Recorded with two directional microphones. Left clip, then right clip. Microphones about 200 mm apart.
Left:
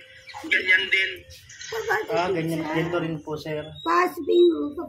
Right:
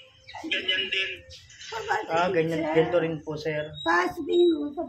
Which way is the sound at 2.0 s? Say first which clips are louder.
Even; 25° right (ahead or behind).